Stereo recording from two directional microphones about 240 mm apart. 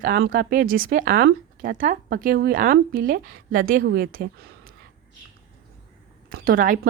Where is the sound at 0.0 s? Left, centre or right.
Right.